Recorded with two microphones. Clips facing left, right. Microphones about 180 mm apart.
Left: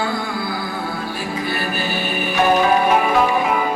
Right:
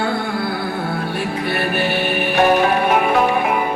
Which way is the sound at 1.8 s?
60° right (ahead or behind).